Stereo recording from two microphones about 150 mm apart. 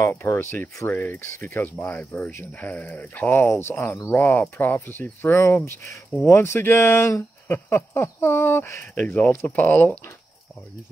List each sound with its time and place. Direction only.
0.0 s speech: 15° left (ahead or behind)